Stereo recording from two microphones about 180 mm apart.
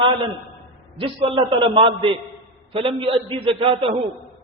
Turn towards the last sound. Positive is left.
turn(degrees=-30)  # may be behind; listen again after turning